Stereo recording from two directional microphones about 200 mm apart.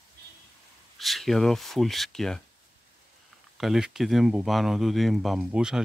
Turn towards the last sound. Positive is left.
turn(degrees=-5)  # may be behind; listen again after turning